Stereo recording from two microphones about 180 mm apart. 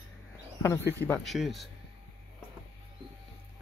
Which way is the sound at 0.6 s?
15° left (ahead or behind).